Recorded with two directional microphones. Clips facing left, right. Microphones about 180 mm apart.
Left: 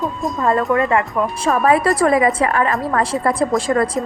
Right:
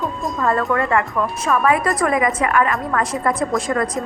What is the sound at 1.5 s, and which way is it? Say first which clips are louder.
A woman's voice: left 3 dB; 35° left (ahead or behind).